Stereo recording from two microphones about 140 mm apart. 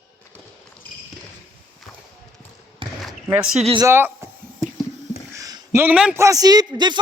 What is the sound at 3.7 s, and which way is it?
Speech, 20° right (ahead or behind).